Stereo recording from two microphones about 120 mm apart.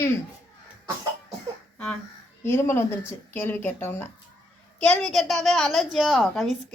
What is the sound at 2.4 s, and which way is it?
A child's voice, 20° left (ahead or behind).